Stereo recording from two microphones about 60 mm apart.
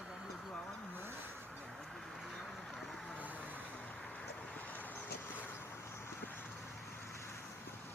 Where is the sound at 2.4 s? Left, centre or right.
Centre.